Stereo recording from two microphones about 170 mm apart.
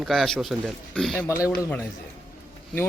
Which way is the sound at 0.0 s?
Centre (ahead or behind).